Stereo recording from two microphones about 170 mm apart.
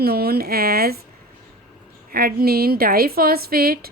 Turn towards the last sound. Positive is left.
turn(degrees=-60)  # may be behind; listen again after turning